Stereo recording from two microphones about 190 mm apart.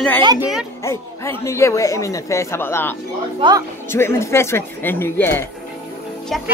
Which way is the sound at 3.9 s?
15° left (ahead or behind).